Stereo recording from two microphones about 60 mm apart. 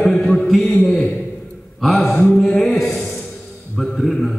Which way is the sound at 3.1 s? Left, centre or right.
Centre.